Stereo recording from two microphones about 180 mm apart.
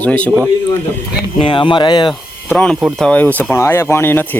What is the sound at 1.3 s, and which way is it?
Speech, 25° left (ahead or behind).